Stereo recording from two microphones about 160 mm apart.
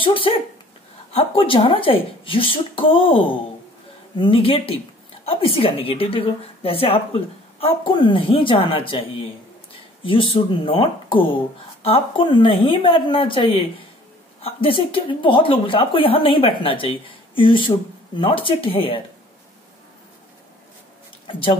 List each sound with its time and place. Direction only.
0.0 s speech: 35° left (ahead or behind)
10.0 s speech: 35° left (ahead or behind)